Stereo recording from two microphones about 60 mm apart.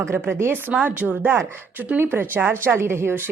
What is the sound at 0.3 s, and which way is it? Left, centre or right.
A woman's voice, right.